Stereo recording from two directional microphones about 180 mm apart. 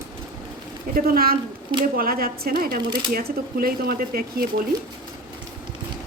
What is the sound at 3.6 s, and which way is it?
Speech, 55° right (ahead or behind).